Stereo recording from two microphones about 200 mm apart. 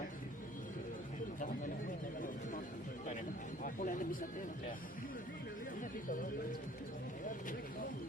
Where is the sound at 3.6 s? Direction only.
40° left (ahead or behind).